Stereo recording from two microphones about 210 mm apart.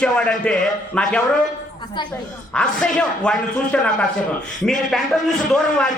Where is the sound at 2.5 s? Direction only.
5° left (ahead or behind).